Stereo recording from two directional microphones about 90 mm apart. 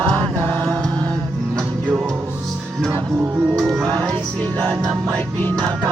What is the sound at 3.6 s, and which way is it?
Music, centre (ahead or behind).